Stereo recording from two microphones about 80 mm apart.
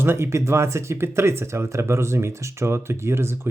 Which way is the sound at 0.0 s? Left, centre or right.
Right.